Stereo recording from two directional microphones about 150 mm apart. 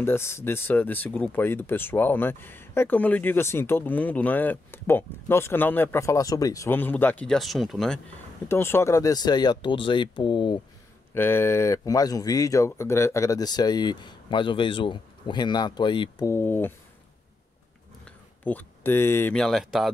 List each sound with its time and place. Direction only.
0.0 s speech: 15° left (ahead or behind)
8.5 s speech: 15° left (ahead or behind); by 10.6 s 30° left (ahead or behind)
11.1 s speech: 15° left (ahead or behind); by 16.3 s 30° left (ahead or behind)
16.3 s speech: 15° left (ahead or behind)
18.0 s a sound: 10° left (ahead or behind)
19.3 s speech: centre (ahead or behind)